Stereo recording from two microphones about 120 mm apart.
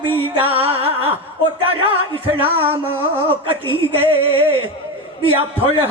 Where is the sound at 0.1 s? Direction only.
50° right (ahead or behind).